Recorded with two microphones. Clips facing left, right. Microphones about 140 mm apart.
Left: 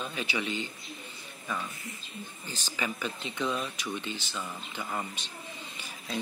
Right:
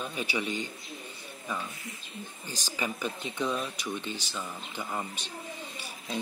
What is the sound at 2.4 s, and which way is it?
Speech, 15° right (ahead or behind).